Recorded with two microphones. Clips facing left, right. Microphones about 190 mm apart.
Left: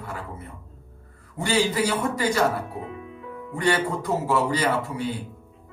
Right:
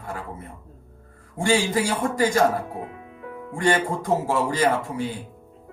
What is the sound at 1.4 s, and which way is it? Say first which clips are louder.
Speech: right 1 dB; 45° right (ahead or behind).